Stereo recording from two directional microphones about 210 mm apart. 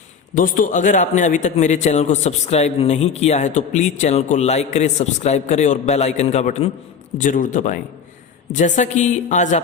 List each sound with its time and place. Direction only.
0.3 s a man's voice: 40° left (ahead or behind)